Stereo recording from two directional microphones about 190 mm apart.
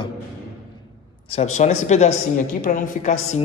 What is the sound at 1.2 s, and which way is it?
A woman's voice, 35° left (ahead or behind).